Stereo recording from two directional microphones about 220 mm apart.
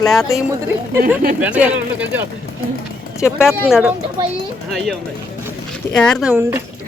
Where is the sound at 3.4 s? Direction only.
5° right (ahead or behind).